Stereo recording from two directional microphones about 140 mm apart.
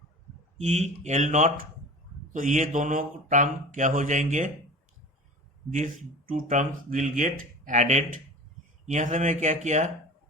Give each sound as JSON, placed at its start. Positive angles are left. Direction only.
{"t": 0.6, "sound": "speech", "side_deg": -55}
{"t": 5.7, "sound": "speech", "side_deg": -65}